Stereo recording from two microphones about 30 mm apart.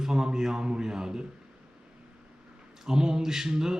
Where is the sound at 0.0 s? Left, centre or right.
Right.